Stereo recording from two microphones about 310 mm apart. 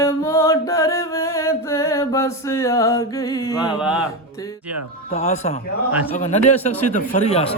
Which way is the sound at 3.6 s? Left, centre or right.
Centre.